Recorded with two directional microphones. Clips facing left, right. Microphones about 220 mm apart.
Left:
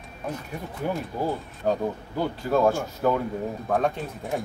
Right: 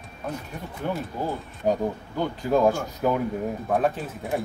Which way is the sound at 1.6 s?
15° right (ahead or behind).